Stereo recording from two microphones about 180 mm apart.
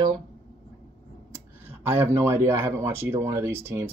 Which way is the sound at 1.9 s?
15° right (ahead or behind).